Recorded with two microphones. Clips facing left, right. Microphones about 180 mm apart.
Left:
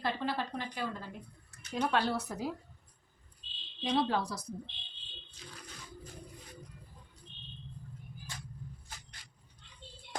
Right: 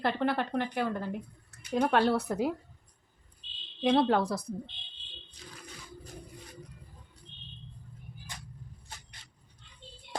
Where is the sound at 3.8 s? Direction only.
60° right (ahead or behind).